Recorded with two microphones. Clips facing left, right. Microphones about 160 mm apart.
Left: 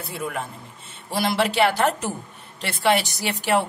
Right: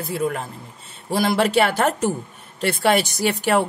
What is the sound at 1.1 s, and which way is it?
A woman's voice, 45° right (ahead or behind).